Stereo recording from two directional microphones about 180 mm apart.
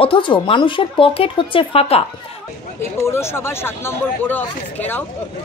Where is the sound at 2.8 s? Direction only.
15° left (ahead or behind).